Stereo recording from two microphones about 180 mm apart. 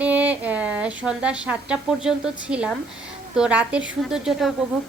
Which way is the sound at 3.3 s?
5° right (ahead or behind).